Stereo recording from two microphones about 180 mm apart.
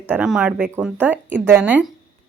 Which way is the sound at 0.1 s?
5° right (ahead or behind).